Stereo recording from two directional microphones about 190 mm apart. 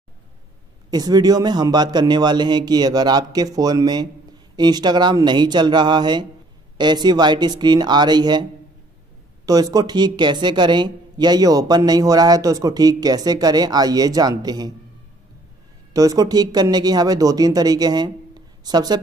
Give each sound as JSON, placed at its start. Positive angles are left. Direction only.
{"t": 0.8, "sound": "speech", "side_deg": -20}
{"t": 9.5, "sound": "speech", "side_deg": -20}
{"t": 15.9, "sound": "speech", "side_deg": -20}